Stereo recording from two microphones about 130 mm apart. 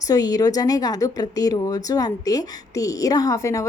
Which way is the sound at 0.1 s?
30° left (ahead or behind).